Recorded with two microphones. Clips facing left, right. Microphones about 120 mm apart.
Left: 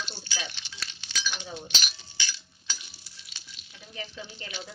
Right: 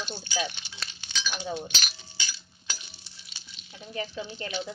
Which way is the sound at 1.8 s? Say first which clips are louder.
Even; 45° right (ahead or behind).